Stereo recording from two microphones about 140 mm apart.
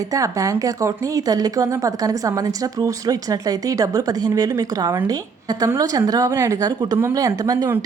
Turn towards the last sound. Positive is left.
turn(degrees=-25)  # may be behind; listen again after turning